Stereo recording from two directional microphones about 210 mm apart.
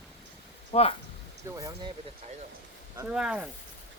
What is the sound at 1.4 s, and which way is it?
Speech, 15° right (ahead or behind).